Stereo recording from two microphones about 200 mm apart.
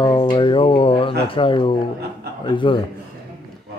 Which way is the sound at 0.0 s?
20° left (ahead or behind).